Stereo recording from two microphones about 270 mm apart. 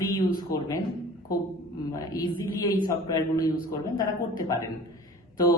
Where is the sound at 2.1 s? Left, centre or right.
Centre.